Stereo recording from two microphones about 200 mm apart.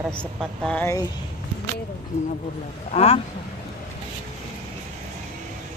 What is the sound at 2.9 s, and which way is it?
Speech, 30° left (ahead or behind).